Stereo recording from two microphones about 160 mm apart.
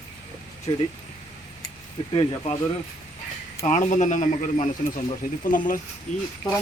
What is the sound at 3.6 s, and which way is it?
A man's voice, 50° left (ahead or behind).